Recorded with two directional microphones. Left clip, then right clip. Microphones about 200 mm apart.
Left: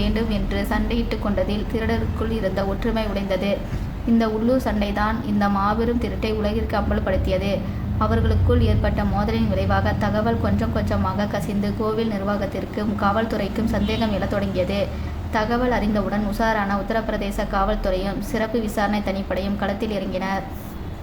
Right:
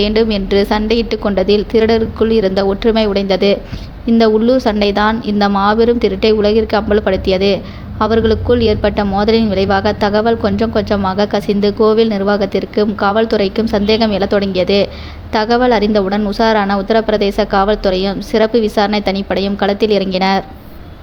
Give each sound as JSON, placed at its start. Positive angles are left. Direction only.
{"t": 0.0, "sound": "a woman's voice", "side_deg": -40}